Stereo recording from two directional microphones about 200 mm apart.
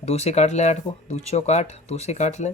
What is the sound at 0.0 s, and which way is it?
Speech, 30° left (ahead or behind).